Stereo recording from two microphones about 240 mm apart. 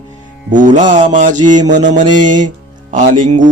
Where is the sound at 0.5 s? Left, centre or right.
Right.